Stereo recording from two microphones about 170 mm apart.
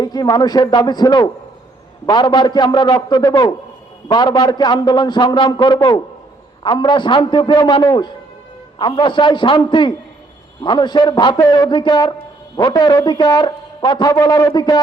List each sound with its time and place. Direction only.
0.0 s speech: 25° left (ahead or behind)